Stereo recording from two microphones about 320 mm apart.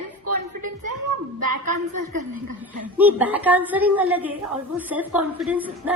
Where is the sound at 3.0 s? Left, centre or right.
Centre.